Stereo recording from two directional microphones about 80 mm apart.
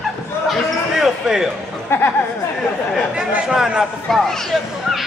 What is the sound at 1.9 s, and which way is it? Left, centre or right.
Speech, left.